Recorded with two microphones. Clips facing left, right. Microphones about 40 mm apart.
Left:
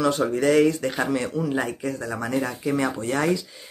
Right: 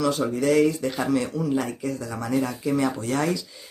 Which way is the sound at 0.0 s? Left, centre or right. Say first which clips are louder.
Left 2 dB; left.